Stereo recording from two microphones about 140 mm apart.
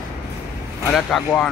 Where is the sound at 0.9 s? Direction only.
5° left (ahead or behind).